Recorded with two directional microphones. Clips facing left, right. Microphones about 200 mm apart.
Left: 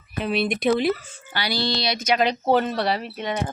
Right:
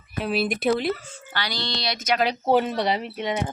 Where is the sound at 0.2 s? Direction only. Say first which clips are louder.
Left 1 dB; centre (ahead or behind).